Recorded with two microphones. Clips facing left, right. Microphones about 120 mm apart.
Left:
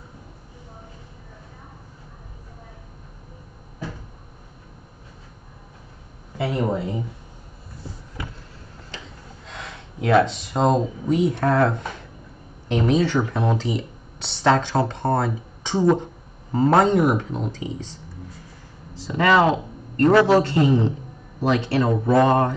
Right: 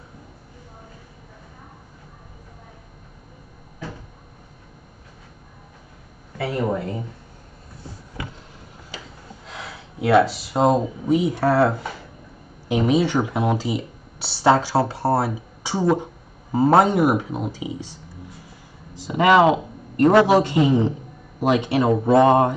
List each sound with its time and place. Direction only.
6.3 s speech: 20° left (ahead or behind)
8.9 s rub: 10° right (ahead or behind)
9.5 s speech: 5° right (ahead or behind)
18.9 s speech: 15° right (ahead or behind)